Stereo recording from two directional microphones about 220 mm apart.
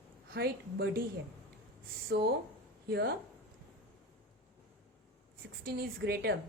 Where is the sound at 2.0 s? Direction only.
45° right (ahead or behind).